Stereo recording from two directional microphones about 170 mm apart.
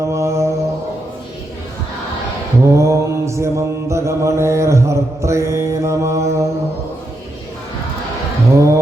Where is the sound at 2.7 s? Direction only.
15° right (ahead or behind).